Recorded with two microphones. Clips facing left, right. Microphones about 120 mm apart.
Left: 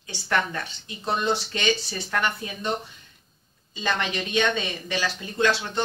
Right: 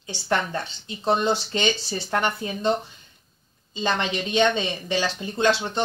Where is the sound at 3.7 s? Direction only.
25° right (ahead or behind).